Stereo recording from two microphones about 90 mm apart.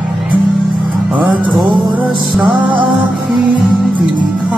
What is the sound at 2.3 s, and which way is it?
Music, 15° right (ahead or behind).